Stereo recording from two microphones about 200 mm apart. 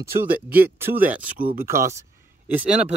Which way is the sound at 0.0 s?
10° right (ahead or behind).